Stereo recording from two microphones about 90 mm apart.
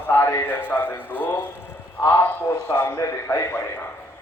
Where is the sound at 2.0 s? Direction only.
35° left (ahead or behind).